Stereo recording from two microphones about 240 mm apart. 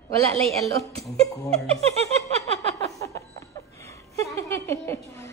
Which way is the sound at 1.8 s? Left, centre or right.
Right.